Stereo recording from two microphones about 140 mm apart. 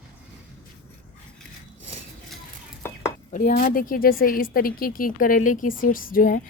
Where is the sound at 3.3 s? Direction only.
65° left (ahead or behind); by 6.4 s 90° left.